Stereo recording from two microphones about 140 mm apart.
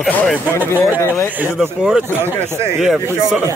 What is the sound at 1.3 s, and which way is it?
Speech, 10° right (ahead or behind).